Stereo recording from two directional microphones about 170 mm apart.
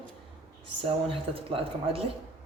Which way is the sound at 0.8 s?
35° right (ahead or behind).